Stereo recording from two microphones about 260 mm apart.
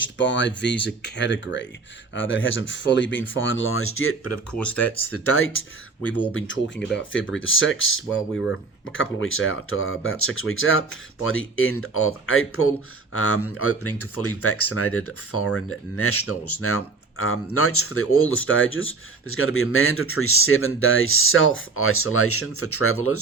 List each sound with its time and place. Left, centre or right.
0.2 s speech: left
6.7 s speech: centre
7.1 s speech: left